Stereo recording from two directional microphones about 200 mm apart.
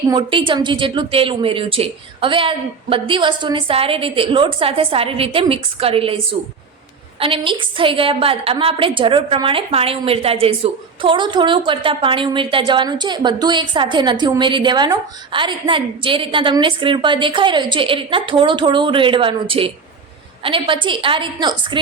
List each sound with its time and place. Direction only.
0.1 s a woman's voice: 25° right (ahead or behind)
7.2 s a woman's voice: 25° right (ahead or behind)